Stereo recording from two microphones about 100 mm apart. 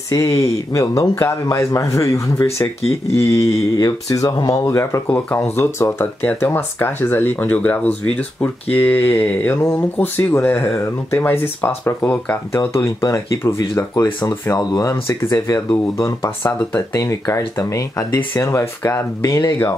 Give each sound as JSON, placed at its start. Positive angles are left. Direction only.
{"t": 0.1, "sound": "a man's voice", "side_deg": 30}
{"t": 4.6, "sound": "speech", "side_deg": 30}
{"t": 12.5, "sound": "a man's voice", "side_deg": 30}
{"t": 14.6, "sound": "a man's voice", "side_deg": 40}